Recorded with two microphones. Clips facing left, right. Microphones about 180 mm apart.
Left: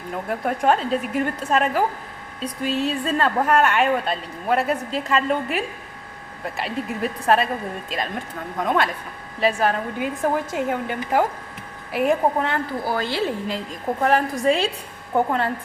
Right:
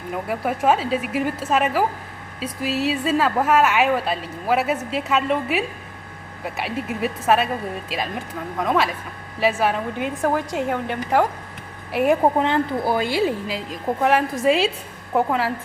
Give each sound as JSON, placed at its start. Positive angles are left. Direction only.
{"t": 0.1, "sound": "a woman's voice", "side_deg": -5}
{"t": 12.4, "sound": "speech", "side_deg": -20}
{"t": 13.0, "sound": "a woman's voice", "side_deg": -10}